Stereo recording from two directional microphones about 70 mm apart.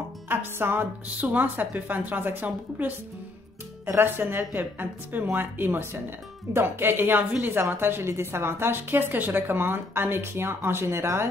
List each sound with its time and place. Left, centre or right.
0.3 s a woman's voice: right
3.8 s a woman's voice: right